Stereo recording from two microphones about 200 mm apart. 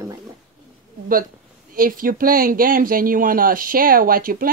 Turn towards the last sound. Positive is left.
turn(degrees=-45)  # may be behind; listen again after turning